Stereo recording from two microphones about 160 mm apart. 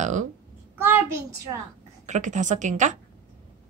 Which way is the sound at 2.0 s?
50° right (ahead or behind).